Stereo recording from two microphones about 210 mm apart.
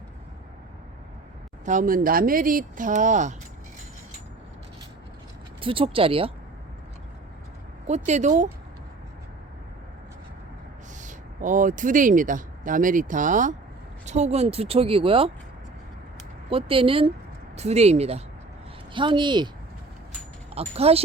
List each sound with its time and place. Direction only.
1.6 s speech: 40° right (ahead or behind)
5.5 s speech: 25° right (ahead or behind)
7.9 s speech: 35° right (ahead or behind)
11.0 s speech: 40° right (ahead or behind)
16.5 s speech: 25° right (ahead or behind)
20.6 s speech: 30° right (ahead or behind)